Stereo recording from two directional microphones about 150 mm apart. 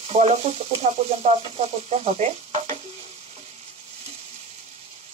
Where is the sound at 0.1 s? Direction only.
45° right (ahead or behind).